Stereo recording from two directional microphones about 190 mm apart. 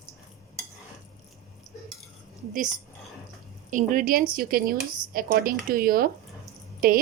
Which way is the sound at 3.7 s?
45° right (ahead or behind).